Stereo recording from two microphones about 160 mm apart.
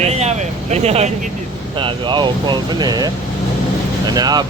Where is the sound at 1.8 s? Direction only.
30° right (ahead or behind).